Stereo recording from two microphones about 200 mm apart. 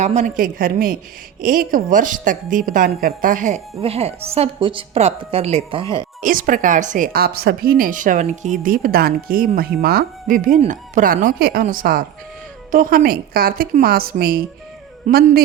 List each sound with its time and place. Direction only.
0.0 s a woman's voice: 35° right (ahead or behind)
5.8 s speech: 15° left (ahead or behind)
6.2 s speech: 40° right (ahead or behind)